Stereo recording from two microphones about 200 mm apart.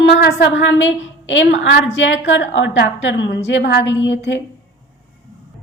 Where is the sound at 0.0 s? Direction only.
55° left (ahead or behind).